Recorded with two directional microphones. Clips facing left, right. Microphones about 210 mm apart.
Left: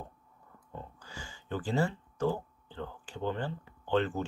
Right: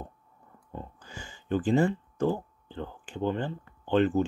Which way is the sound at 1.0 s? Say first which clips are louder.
Right 6 dB; 20° right (ahead or behind).